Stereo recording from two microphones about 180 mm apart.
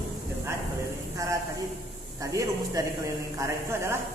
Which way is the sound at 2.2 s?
20° right (ahead or behind).